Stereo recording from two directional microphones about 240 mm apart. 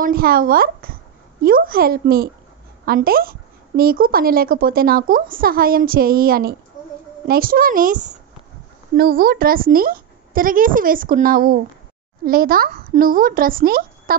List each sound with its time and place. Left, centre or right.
0.0 s speech: right